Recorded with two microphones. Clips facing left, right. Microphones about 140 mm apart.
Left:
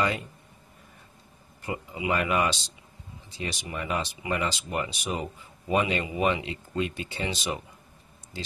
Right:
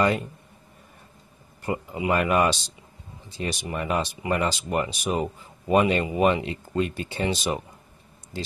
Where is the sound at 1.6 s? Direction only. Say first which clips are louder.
Right 4 dB; 45° right (ahead or behind).